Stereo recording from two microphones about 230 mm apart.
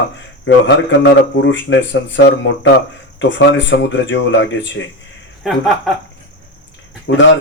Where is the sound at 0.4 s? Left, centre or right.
Left.